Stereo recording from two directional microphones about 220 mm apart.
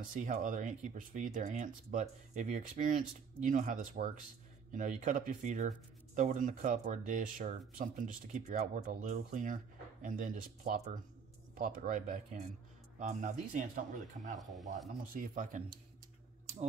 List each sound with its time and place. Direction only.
0.1 s speech: 35° right (ahead or behind)